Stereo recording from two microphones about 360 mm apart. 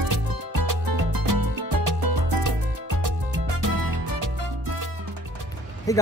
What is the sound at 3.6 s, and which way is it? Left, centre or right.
Music, right.